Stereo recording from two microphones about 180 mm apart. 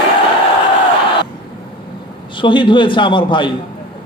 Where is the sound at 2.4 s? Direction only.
25° left (ahead or behind).